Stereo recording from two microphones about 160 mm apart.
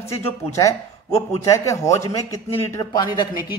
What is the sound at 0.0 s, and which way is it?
A man's voice, 20° left (ahead or behind).